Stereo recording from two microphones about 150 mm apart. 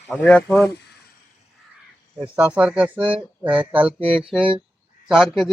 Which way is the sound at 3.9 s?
40° right (ahead or behind).